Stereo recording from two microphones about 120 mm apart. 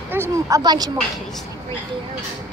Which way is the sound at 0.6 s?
35° right (ahead or behind).